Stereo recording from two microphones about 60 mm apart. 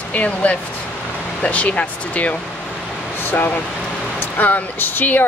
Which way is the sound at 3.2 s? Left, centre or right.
Left.